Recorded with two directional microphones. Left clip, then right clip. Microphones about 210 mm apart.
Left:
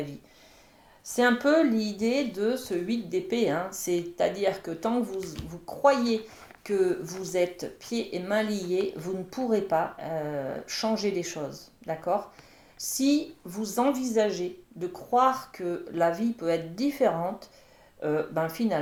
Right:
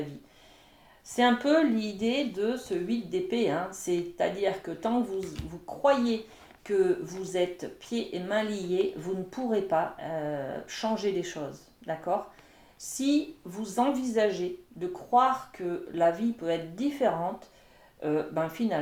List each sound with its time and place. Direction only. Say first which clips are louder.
1.0 s a woman's voice: left 1 dB; 30° left (ahead or behind)